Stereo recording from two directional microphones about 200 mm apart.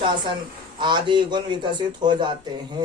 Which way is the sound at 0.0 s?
25° right (ahead or behind).